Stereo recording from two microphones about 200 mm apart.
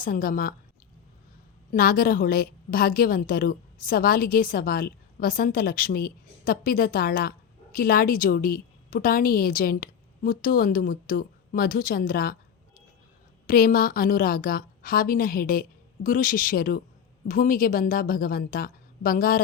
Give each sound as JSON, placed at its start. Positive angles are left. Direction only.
{"t": 0.0, "sound": "a woman's voice", "side_deg": 45}
{"t": 1.7, "sound": "a woman's voice", "side_deg": 45}